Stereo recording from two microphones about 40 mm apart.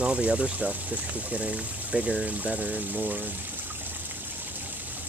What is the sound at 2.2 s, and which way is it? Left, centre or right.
Speech, right.